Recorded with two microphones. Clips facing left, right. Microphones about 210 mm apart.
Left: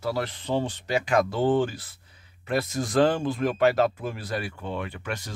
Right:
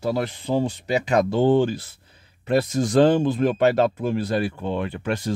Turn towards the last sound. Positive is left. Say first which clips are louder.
# right 9 dB
turn(degrees=-30)  # may be behind; listen again after turning